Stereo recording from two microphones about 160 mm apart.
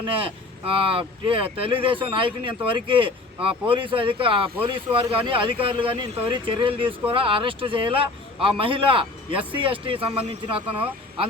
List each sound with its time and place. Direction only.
0.0 s speech: 35° right (ahead or behind)